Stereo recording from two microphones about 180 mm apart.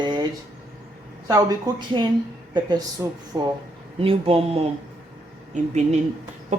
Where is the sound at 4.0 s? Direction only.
30° right (ahead or behind).